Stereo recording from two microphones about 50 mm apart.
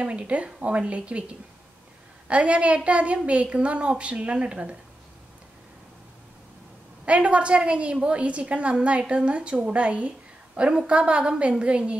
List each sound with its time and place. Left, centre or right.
0.0 s a woman's voice: right
2.2 s a woman's voice: right
7.1 s a woman's voice: right